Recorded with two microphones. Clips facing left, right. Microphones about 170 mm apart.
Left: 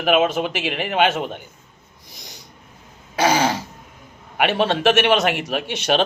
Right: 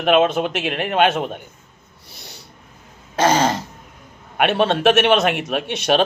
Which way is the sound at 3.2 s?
10° left (ahead or behind).